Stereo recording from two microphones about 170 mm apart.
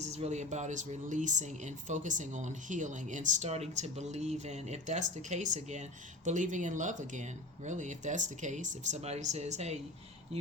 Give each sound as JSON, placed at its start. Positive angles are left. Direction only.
{"t": 0.0, "sound": "speech", "side_deg": -40}